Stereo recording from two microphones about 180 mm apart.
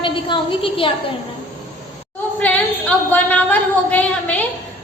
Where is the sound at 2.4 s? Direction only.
10° left (ahead or behind).